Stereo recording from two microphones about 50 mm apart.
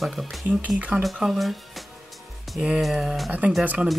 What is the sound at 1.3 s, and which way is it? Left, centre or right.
Speech, centre.